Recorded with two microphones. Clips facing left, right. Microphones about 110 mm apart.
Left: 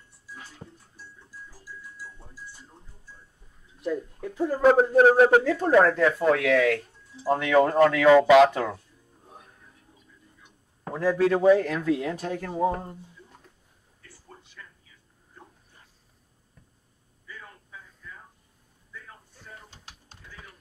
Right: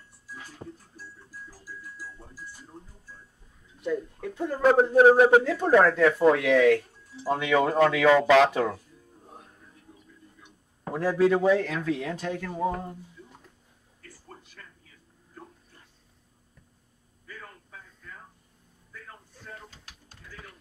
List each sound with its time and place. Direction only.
3.8 s a man's voice: 5° left (ahead or behind)
5.6 s a man's voice: 5° left (ahead or behind)
6.1 s speech: 20° right (ahead or behind)
7.2 s a man's voice: 5° right (ahead or behind)
8.1 s speech: 10° left (ahead or behind)
8.5 s speech: 5° right (ahead or behind)
10.9 s a man's voice: 5° right (ahead or behind)
12.2 s speech: 35° left (ahead or behind)
12.4 s speech: 25° left (ahead or behind)
17.3 s a sound: 50° right (ahead or behind)
19.7 s typing: 20° left (ahead or behind)